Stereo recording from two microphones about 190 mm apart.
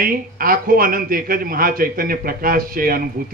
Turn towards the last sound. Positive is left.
turn(degrees=-50)  # may be behind; listen again after turning